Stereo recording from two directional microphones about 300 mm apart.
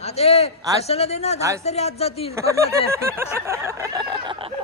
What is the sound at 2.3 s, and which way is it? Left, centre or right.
A man's voice, centre.